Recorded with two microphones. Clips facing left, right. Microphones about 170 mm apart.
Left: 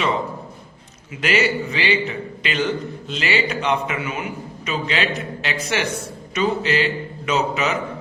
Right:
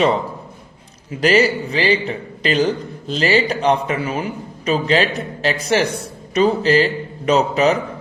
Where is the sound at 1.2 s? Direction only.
35° right (ahead or behind).